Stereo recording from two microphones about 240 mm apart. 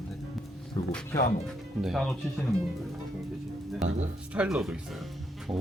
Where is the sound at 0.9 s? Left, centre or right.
Centre.